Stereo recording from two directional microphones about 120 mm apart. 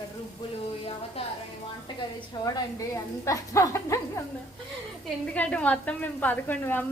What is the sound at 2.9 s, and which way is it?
A woman's voice, 25° left (ahead or behind).